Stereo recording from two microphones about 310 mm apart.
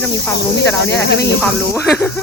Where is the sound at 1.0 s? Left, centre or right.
Left.